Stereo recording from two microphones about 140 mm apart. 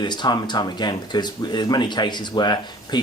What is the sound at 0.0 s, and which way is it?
Speech, 30° left (ahead or behind).